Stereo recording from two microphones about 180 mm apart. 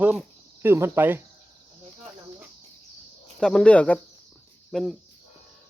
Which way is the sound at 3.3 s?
5° left (ahead or behind).